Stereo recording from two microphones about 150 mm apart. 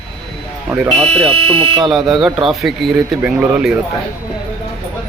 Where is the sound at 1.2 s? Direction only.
40° right (ahead or behind).